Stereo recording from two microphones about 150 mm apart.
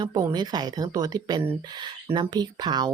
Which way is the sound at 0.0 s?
25° right (ahead or behind).